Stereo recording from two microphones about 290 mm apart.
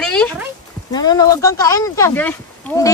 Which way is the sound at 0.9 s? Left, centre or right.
Centre.